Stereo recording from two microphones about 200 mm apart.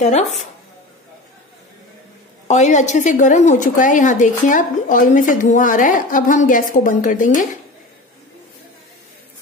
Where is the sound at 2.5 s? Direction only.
35° left (ahead or behind).